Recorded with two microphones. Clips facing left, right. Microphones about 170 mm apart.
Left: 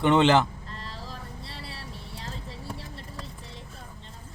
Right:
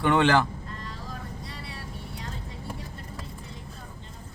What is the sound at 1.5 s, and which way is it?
Vehicle, 30° left (ahead or behind).